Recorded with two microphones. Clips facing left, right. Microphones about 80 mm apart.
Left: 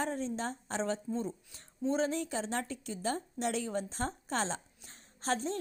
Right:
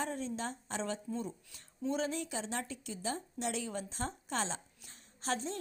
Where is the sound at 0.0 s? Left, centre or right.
Left.